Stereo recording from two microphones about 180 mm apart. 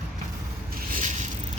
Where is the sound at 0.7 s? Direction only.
45° right (ahead or behind).